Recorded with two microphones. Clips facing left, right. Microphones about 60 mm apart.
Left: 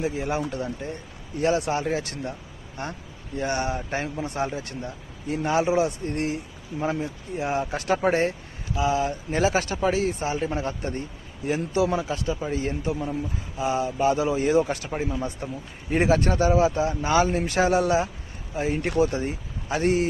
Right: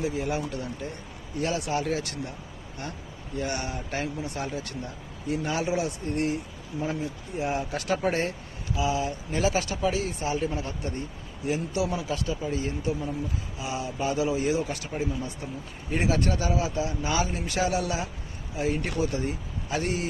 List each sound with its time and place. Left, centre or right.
0.0 s speech: left